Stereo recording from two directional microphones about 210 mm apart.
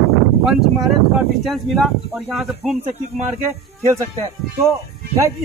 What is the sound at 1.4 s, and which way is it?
Speech, centre (ahead or behind).